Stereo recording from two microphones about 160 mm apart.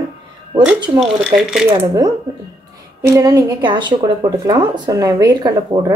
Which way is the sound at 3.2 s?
20° right (ahead or behind).